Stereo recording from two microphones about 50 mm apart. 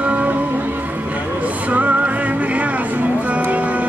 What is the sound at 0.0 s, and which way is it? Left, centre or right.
Music, right.